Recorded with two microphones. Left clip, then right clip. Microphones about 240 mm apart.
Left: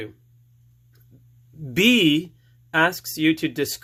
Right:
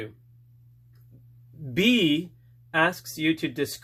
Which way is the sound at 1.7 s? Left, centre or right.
Left.